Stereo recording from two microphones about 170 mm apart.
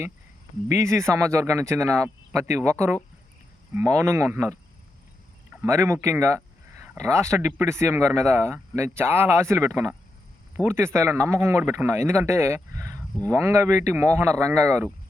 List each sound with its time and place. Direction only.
0.7 s speech: 15° right (ahead or behind)
5.6 s speech: 20° right (ahead or behind)